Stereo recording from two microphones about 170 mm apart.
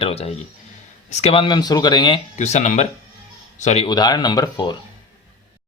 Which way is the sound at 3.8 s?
25° left (ahead or behind).